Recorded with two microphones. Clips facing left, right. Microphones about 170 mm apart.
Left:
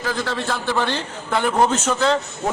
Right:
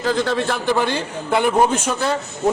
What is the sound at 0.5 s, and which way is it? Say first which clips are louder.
A man's voice: right 3 dB; 15° right (ahead or behind).